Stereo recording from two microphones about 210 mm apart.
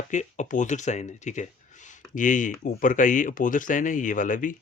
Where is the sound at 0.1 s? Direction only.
35° left (ahead or behind).